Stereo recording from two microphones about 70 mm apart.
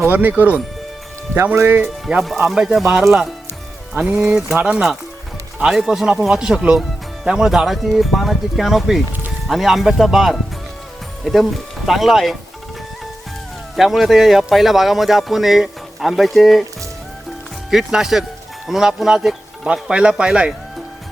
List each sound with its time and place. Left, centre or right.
0.1 s speech: right
1.5 s speech: right
2.0 s speech: centre
3.9 s speech: centre
11.9 s speech: centre
13.7 s speech: centre
17.7 s speech: centre